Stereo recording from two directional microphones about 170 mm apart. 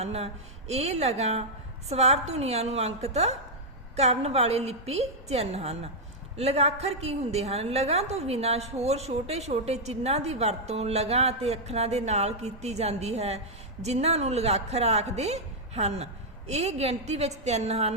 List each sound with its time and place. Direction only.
0.0 s a woman's voice: 40° right (ahead or behind)